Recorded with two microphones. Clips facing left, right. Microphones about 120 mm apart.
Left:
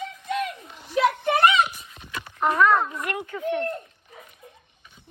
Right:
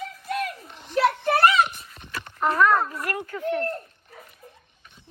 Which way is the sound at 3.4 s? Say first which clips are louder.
Even; centre (ahead or behind).